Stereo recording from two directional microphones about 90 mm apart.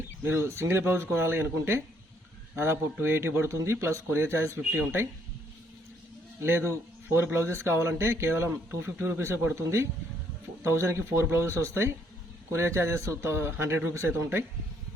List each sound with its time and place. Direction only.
0.2 s a man's voice: 25° right (ahead or behind)
6.4 s a man's voice: 25° right (ahead or behind)